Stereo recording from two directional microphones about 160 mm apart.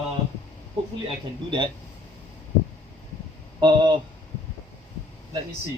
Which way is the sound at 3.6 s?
30° right (ahead or behind).